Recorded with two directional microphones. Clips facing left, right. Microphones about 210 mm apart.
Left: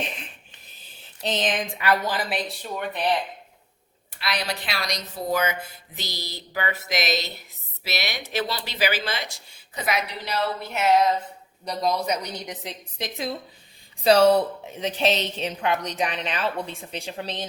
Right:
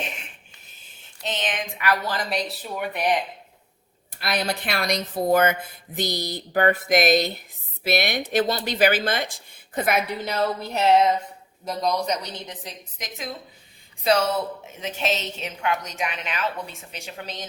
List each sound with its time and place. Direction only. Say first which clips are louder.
1.2 s a woman's voice: left 3 dB; 35° left (ahead or behind)
2.0 s speech: even; 5° left (ahead or behind); by 3.2 s 15° right (ahead or behind)
4.2 s speech: right 3 dB; 50° right (ahead or behind)
10.7 s a sound: right 1 dB; 30° right (ahead or behind)
11.6 s speech: even; centre (ahead or behind)
12.6 s a woman's voice: left 4 dB; 30° left (ahead or behind)